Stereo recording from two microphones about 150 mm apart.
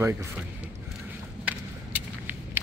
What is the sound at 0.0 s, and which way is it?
Speech, 15° right (ahead or behind).